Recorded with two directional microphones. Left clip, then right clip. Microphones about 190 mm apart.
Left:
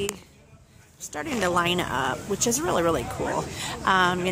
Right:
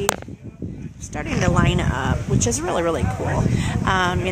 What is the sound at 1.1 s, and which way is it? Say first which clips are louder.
Speech: right 2 dB; 5° left (ahead or behind).